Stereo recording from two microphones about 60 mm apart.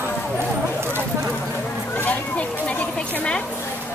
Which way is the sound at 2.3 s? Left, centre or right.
Left.